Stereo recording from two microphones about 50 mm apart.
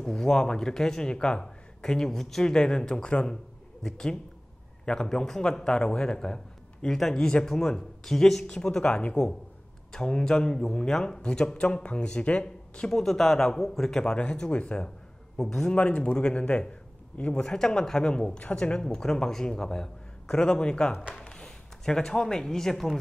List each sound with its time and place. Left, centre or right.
0.0 s speech: centre
12.9 s speech: centre; by 14.9 s left
15.3 s a man's voice: centre
15.7 s speech: left
17.5 s speech: centre